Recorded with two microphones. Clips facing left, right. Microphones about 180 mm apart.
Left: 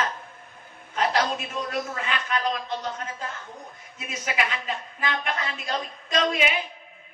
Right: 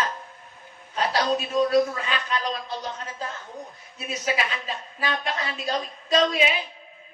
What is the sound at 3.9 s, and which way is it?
A man's voice, 35° right (ahead or behind).